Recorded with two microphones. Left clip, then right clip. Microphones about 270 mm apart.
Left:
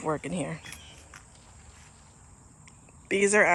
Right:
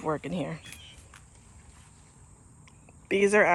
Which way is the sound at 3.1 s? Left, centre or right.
Centre.